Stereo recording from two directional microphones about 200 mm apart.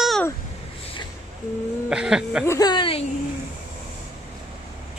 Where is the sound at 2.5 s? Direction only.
20° left (ahead or behind).